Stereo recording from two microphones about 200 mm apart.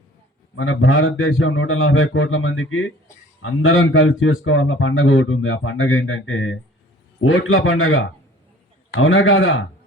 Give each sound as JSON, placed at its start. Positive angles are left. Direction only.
{"t": 0.5, "sound": "speech", "side_deg": 75}